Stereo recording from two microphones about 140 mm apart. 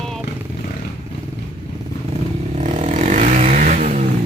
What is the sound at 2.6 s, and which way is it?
Vehicle, 55° right (ahead or behind).